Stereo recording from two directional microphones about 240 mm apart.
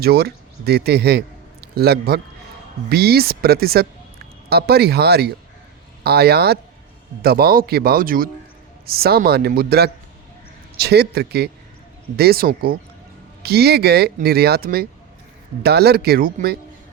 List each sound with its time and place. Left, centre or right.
0.0 s a man's voice: right